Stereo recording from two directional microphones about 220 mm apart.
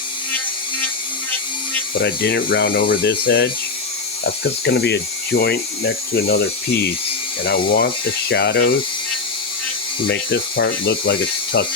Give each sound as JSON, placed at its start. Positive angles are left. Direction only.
{"t": 2.0, "sound": "speech", "side_deg": 50}
{"t": 7.4, "sound": "speech", "side_deg": 45}
{"t": 10.1, "sound": "speech", "side_deg": 50}